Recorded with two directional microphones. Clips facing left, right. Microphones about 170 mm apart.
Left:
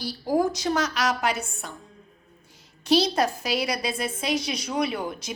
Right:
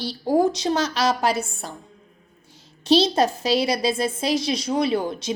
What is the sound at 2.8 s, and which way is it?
Speech, 25° right (ahead or behind).